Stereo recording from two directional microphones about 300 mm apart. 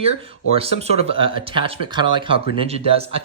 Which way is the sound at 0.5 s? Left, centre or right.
Centre.